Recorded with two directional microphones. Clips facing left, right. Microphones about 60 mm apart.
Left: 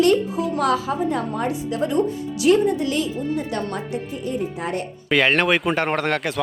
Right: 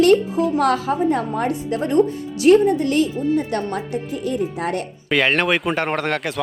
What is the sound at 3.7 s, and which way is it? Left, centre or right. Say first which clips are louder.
Speech: right 2 dB; right.